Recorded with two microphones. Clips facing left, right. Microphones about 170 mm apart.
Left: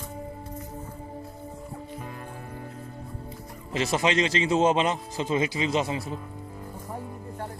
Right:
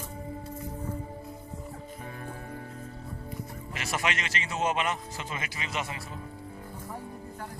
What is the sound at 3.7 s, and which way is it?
A man's voice, 25° left (ahead or behind).